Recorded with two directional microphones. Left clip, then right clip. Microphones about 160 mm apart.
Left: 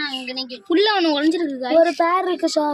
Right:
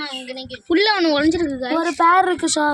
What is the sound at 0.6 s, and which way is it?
A child's voice, centre (ahead or behind).